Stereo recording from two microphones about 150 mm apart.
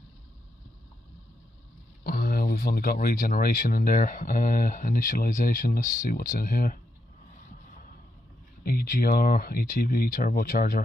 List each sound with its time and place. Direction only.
2.0 s speech: 80° left
8.6 s speech: 75° left (ahead or behind)